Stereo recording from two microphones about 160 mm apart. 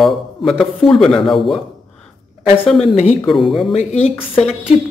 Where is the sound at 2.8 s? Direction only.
40° left (ahead or behind).